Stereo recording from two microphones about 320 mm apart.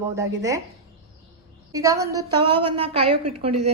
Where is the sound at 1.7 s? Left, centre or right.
Centre.